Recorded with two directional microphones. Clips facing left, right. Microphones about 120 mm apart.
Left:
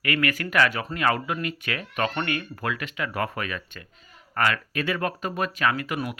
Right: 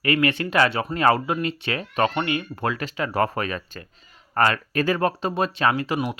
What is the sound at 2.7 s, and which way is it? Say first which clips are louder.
Speech: right 4 dB; 35° right (ahead or behind).